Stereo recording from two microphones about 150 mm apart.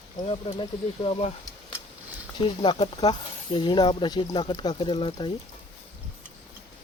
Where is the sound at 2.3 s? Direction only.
35° left (ahead or behind).